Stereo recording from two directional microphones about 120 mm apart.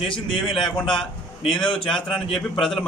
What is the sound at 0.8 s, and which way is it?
A man's voice, 45° left (ahead or behind).